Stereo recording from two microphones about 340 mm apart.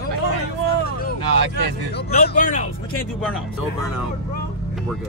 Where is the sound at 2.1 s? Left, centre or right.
Left.